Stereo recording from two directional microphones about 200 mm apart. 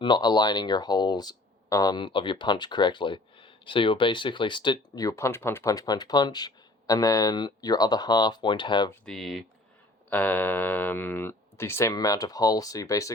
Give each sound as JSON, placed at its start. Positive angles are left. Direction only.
{"t": 0.0, "sound": "speech", "side_deg": 20}
{"t": 9.0, "sound": "speech", "side_deg": 0}